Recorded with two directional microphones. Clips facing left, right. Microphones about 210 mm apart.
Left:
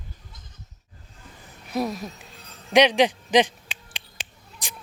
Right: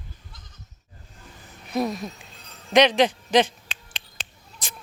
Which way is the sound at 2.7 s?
10° left (ahead or behind).